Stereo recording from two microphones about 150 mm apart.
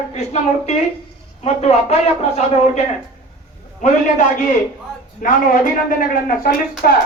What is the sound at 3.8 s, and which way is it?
Speech, 55° left (ahead or behind).